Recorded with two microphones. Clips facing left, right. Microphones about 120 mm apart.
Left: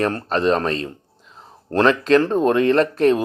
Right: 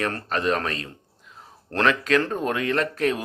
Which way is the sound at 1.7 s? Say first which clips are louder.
Left 6 dB; 30° left (ahead or behind).